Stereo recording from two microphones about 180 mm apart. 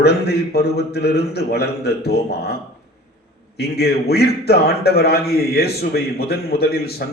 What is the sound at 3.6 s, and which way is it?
A man's voice, 60° left (ahead or behind).